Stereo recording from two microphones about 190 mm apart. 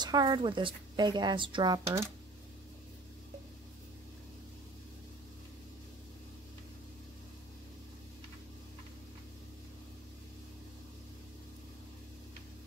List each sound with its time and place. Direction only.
0.0 s speech: 20° right (ahead or behind)